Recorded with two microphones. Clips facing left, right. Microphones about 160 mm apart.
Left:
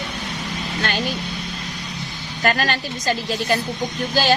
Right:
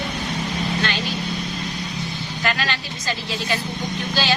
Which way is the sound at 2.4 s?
45° left (ahead or behind).